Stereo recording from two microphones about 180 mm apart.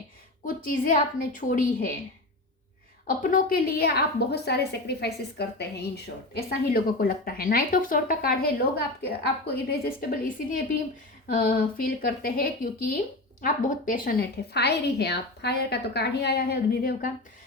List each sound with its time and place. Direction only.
0.4 s a woman's voice: 50° left (ahead or behind)
3.2 s a woman's voice: 50° left (ahead or behind)